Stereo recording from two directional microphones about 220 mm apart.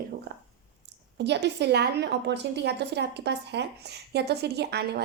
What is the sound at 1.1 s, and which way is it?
A woman's voice, 50° right (ahead or behind).